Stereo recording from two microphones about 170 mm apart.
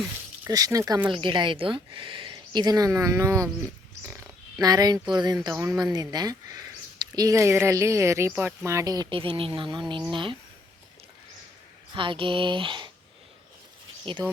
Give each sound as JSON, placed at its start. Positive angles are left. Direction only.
{"t": 0.4, "sound": "speech", "side_deg": -20}
{"t": 4.6, "sound": "speech", "side_deg": -20}
{"t": 11.9, "sound": "speech", "side_deg": -30}